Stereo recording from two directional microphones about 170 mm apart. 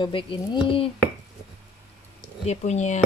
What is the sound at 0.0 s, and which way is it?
Speech, 30° left (ahead or behind).